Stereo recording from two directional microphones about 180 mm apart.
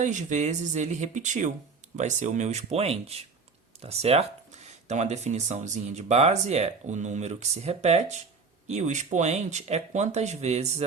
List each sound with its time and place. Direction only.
0.0 s speech: 40° right (ahead or behind)